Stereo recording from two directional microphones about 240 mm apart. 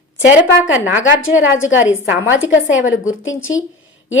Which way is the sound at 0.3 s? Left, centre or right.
Centre.